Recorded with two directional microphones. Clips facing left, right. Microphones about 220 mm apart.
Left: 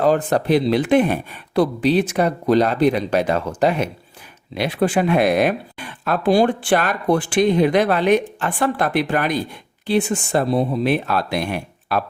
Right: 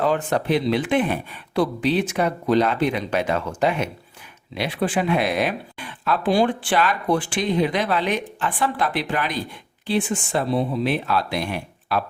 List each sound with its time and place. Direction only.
0.0 s speech: 40° left (ahead or behind)